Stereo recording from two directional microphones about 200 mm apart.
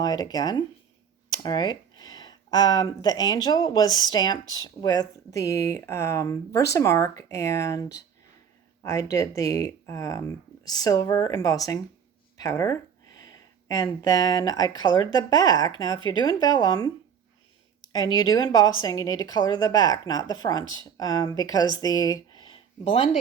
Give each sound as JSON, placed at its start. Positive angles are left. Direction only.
{"t": 0.0, "sound": "a woman's voice", "side_deg": 20}
{"t": 17.9, "sound": "a woman's voice", "side_deg": 20}